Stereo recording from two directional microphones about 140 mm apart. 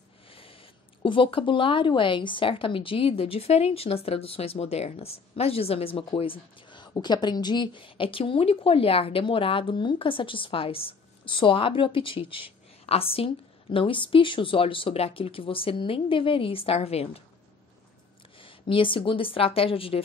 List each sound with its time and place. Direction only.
0.3 s a sound: 40° left (ahead or behind)
1.0 s a woman's voice: 40° left (ahead or behind)
18.4 s a woman's voice: 40° left (ahead or behind)